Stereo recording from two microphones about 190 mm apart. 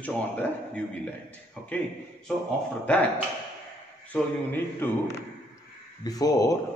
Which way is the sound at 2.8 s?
5° left (ahead or behind).